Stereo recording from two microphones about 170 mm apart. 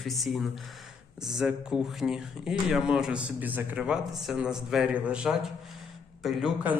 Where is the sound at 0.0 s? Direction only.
Centre (ahead or behind).